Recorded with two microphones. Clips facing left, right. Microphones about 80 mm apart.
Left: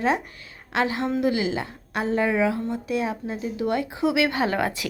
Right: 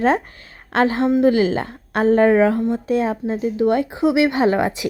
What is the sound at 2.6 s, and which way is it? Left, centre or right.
A woman's voice, right.